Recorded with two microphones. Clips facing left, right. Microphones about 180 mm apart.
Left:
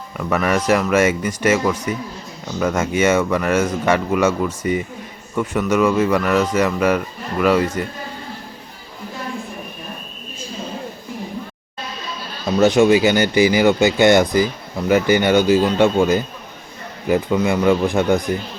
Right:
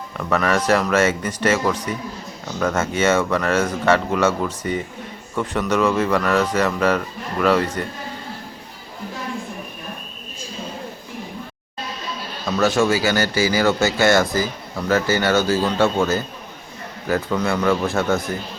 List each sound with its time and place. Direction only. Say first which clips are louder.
0.2 s speech: left 1 dB; 10° left (ahead or behind)
12.5 s speech: left 5 dB; 20° left (ahead or behind)